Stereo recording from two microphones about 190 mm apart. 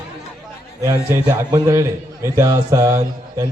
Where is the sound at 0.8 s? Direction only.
15° right (ahead or behind).